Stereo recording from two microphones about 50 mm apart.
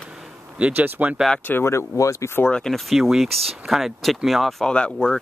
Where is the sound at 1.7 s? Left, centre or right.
Left.